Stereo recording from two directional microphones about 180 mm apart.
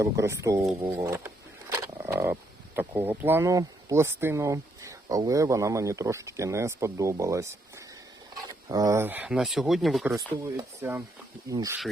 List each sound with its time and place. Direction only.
0.0 s speech: 15° right (ahead or behind); by 10.2 s centre (ahead or behind)
10.2 s speech: 15° right (ahead or behind)